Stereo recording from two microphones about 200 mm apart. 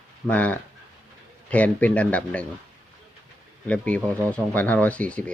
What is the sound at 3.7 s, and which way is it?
Speech, 5° left (ahead or behind).